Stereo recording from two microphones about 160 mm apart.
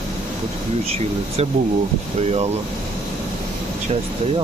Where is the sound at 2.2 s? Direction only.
40° right (ahead or behind).